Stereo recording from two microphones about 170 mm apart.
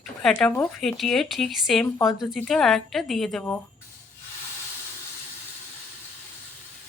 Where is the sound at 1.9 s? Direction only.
20° left (ahead or behind).